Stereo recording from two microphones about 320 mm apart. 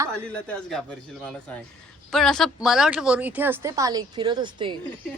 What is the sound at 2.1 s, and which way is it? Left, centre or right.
Speech, centre.